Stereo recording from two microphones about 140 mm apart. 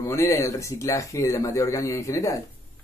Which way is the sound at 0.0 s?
20° left (ahead or behind).